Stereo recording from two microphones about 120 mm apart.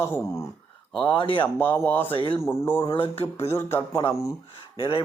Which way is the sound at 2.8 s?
50° left (ahead or behind).